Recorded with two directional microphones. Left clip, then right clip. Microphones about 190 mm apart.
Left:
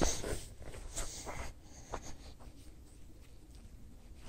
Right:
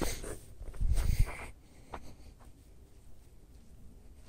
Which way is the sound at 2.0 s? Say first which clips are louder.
Left 5 dB; 25° right (ahead or behind).